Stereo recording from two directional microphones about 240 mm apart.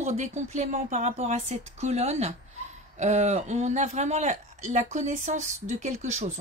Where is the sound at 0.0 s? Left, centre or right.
Right.